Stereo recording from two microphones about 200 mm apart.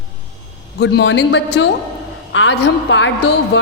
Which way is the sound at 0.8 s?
55° left (ahead or behind).